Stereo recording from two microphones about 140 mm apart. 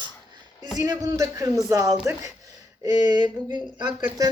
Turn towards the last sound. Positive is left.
turn(degrees=-25)  # may be behind; listen again after turning